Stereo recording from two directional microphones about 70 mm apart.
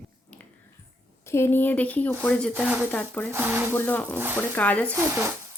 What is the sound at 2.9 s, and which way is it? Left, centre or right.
Speech, left.